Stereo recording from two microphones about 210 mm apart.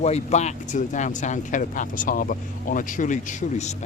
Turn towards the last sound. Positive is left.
turn(degrees=35)  # may be behind; listen again after turning